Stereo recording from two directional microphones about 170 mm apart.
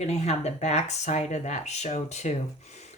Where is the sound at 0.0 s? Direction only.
40° left (ahead or behind).